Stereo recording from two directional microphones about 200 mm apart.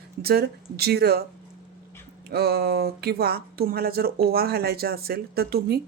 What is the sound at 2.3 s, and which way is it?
Speech, 50° right (ahead or behind).